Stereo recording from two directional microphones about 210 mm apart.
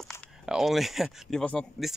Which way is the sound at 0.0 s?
Centre (ahead or behind).